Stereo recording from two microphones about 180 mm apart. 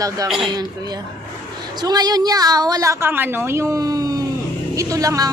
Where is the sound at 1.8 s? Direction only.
25° right (ahead or behind).